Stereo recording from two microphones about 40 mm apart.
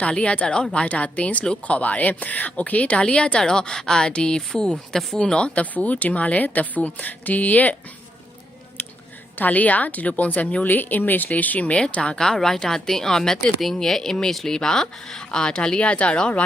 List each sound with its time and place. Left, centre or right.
0.0 s a woman's voice: left
4.9 s speech: centre
5.2 s a woman's voice: left
5.5 s a woman's voice: left
8.8 s a sound: left
9.4 s a woman's voice: left
11.9 s a woman's voice: left
12.1 s speech: centre